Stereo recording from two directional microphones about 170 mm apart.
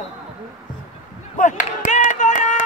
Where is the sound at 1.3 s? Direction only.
45° left (ahead or behind).